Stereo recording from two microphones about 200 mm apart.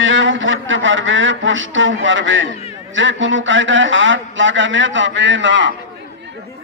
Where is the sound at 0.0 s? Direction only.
70° right (ahead or behind).